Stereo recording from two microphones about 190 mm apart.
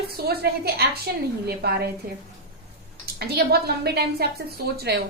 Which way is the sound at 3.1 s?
60° right (ahead or behind).